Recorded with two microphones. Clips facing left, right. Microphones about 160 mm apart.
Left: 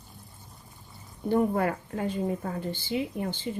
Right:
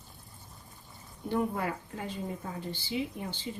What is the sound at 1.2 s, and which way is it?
Speech, 50° left (ahead or behind).